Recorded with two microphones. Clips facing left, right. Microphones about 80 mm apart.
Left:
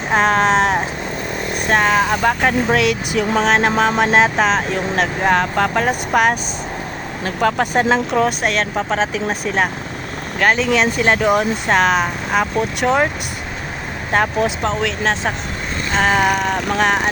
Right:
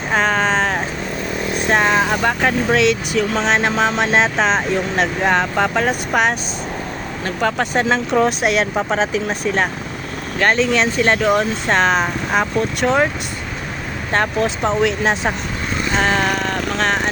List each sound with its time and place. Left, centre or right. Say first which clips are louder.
0.1 s vehicle: left 3 dB; centre
1.5 s speech: left 1 dB; centre
7.6 s vehicle: left 1 dB; centre
8.1 s speech: right 1 dB; centre
14.1 s vehicle: left 1 dB; centre
14.6 s speech: right 2 dB; centre
15.9 s vehicle: left 3 dB; centre